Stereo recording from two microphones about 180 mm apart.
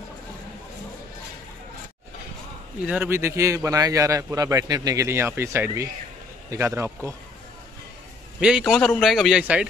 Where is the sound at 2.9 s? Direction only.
10° right (ahead or behind).